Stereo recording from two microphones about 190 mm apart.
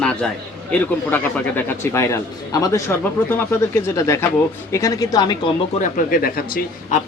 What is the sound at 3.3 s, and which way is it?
A woman's voice, 10° left (ahead or behind).